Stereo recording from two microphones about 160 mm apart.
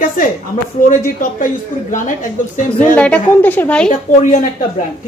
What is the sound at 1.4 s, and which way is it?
A woman's voice, 55° left (ahead or behind).